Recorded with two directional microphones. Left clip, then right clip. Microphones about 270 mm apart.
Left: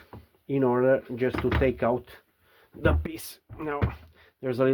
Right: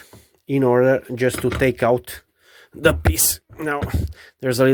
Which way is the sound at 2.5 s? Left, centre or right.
Right.